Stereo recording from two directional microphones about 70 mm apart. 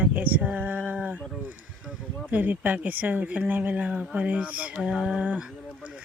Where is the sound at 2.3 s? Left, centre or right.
Right.